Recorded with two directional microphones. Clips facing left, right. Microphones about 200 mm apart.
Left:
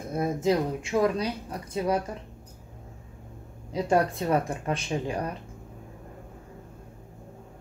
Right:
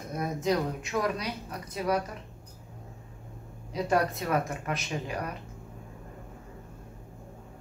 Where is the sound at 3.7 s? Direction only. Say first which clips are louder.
Left 3 dB; 30° left (ahead or behind).